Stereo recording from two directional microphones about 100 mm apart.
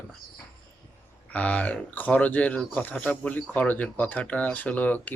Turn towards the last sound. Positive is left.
turn(degrees=15)  # may be behind; listen again after turning